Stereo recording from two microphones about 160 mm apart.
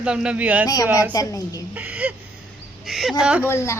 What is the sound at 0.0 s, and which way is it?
Speech, 5° right (ahead or behind).